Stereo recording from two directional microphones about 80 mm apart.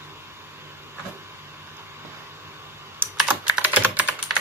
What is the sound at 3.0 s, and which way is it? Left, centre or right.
Typing, right.